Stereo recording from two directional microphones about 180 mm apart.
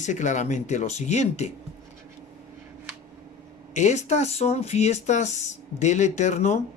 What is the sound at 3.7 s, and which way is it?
Speech, 40° left (ahead or behind).